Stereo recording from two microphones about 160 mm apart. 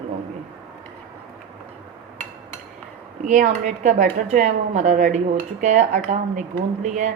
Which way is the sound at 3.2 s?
50° right (ahead or behind).